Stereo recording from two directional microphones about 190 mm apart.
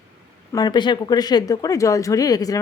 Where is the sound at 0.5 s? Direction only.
20° left (ahead or behind).